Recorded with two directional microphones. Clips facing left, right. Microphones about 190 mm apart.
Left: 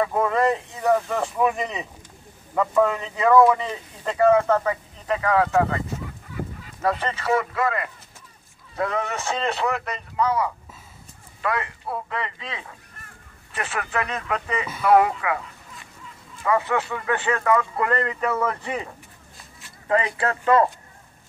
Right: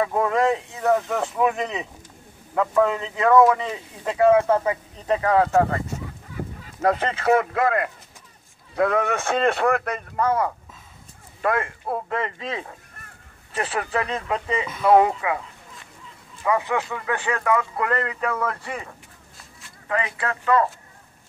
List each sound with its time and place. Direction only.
0.0 s speech: centre (ahead or behind)
5.0 s speech: 30° right (ahead or behind)
6.8 s speech: 50° right (ahead or behind)
13.5 s speech: 30° right (ahead or behind)
16.4 s speech: 15° right (ahead or behind); by 18.4 s centre (ahead or behind)
18.4 s speech: 15° left (ahead or behind)
19.9 s speech: 30° left (ahead or behind)